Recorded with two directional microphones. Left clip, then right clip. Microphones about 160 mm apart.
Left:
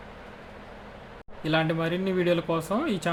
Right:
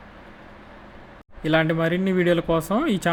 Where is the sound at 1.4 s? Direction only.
25° right (ahead or behind).